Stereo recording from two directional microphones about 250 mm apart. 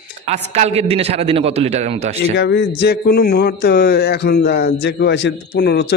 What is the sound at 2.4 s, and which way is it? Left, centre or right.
Speech, left.